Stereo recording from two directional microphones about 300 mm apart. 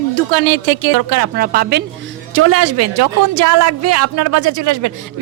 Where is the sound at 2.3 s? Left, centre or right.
Right.